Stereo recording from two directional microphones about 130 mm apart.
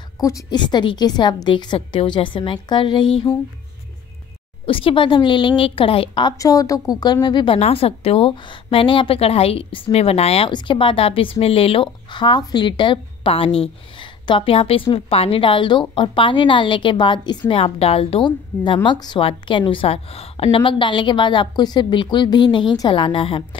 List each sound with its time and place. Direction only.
0.2 s a woman's voice: 30° left (ahead or behind)
4.6 s a woman's voice: 40° left (ahead or behind)
6.3 s a woman's voice: 25° left (ahead or behind)
7.5 s a woman's voice: 50° left (ahead or behind)
10.5 s a woman's voice: 40° left (ahead or behind)